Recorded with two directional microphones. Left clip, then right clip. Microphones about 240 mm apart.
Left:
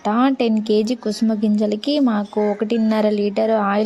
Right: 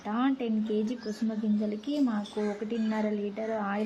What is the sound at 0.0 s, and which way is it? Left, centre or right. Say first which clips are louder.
A woman's voice: left 13 dB; left.